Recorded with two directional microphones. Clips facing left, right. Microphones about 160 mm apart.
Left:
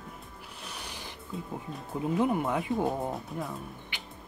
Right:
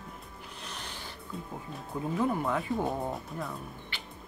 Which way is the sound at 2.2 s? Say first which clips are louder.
Left 1 dB; 15° left (ahead or behind).